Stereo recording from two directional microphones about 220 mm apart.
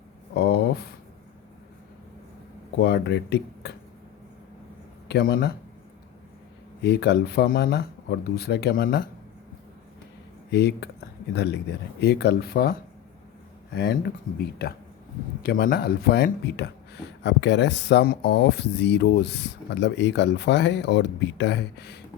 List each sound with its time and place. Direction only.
0.3 s a sound: 45° left (ahead or behind)
2.7 s speech: 45° left (ahead or behind)
5.0 s speech: 45° left (ahead or behind)
6.8 s speech: 50° left (ahead or behind)
10.5 s speech: 50° left (ahead or behind)
13.7 s speech: 50° left (ahead or behind)